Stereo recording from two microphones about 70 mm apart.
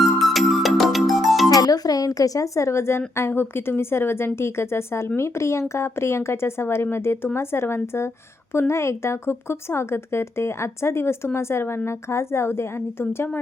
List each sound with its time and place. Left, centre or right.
0.3 s music: centre
1.5 s speech: left